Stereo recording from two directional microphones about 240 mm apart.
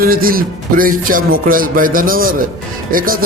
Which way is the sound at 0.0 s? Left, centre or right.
Right.